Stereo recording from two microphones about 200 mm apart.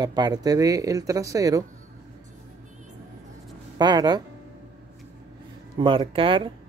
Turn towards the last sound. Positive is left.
turn(degrees=-25)  # may be behind; listen again after turning